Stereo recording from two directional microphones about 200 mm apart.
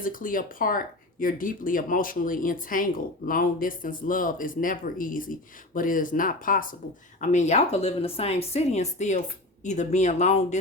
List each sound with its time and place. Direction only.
0.0 s speech: 45° left (ahead or behind)